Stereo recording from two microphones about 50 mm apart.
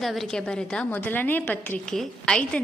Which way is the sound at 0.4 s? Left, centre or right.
Centre.